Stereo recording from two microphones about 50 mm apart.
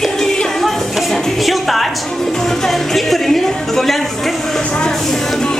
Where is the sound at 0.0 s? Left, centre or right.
Centre.